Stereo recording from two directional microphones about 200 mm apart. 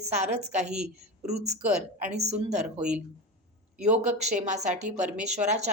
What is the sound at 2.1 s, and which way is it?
Speech, 35° right (ahead or behind).